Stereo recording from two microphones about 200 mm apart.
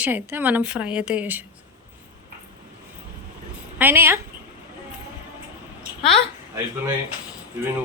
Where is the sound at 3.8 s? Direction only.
10° right (ahead or behind).